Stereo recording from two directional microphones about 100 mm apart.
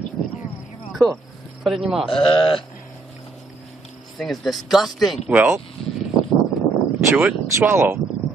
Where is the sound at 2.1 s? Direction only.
60° left (ahead or behind).